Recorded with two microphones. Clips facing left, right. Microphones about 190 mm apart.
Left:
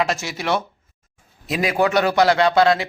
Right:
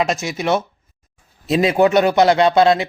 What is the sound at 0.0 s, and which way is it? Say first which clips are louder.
A man's voice: right 3 dB; 20° right (ahead or behind).